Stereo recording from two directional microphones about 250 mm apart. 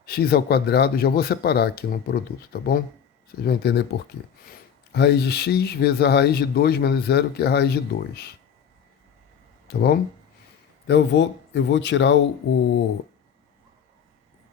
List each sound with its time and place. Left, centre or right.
0.0 s speech: left
4.9 s speech: left
9.6 s speech: left